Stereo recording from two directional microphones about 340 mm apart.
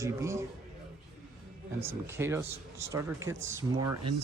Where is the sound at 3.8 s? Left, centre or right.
Right.